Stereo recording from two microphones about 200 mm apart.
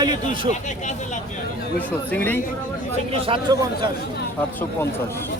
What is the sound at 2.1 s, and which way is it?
Speech, 10° left (ahead or behind).